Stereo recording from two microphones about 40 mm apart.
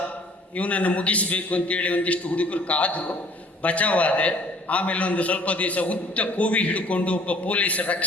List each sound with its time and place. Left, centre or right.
0.5 s a man's voice: left